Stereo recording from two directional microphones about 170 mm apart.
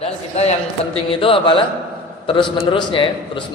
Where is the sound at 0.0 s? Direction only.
40° left (ahead or behind).